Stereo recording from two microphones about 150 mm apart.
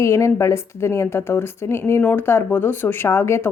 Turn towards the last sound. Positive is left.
turn(degrees=15)  # may be behind; listen again after turning